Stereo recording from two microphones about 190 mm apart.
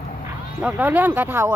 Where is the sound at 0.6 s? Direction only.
10° right (ahead or behind).